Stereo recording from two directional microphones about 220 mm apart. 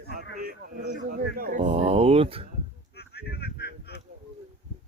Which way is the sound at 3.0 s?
45° left (ahead or behind).